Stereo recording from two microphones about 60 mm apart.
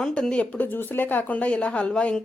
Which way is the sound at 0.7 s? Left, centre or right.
Left.